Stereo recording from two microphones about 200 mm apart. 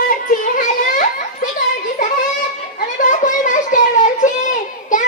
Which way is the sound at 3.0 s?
40° left (ahead or behind).